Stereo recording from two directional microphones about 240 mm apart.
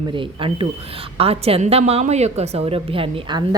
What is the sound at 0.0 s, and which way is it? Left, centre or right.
A woman's voice, right.